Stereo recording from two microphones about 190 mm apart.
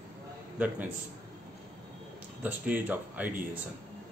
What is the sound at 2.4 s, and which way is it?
Speech, 10° right (ahead or behind).